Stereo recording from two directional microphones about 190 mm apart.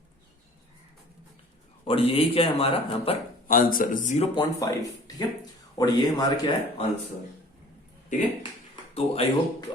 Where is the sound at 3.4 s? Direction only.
45° left (ahead or behind).